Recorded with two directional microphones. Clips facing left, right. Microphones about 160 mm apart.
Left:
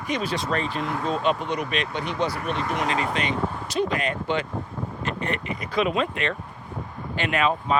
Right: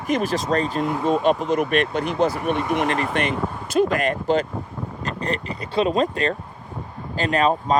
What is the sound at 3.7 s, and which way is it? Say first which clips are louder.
Speech: right 7 dB; 45° right (ahead or behind).